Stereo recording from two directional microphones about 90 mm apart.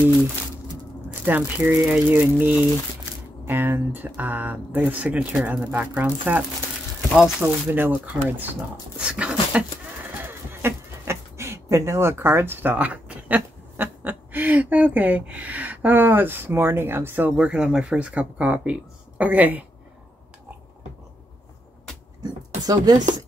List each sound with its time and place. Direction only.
1.2 s speech: 15° right (ahead or behind)
7.4 s speech: 20° right (ahead or behind)
8.9 s dog: 10° right (ahead or behind)
10.2 s speech: 25° right (ahead or behind)
22.2 s speech: 45° right (ahead or behind)